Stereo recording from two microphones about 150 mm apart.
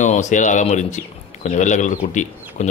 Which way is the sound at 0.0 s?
55° left (ahead or behind).